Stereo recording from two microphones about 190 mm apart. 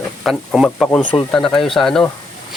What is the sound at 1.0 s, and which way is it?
Speech, 25° left (ahead or behind).